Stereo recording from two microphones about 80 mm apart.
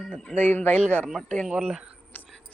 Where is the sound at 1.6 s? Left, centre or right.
Centre.